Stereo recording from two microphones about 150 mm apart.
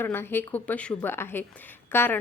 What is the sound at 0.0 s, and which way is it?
A woman's voice, 15° left (ahead or behind).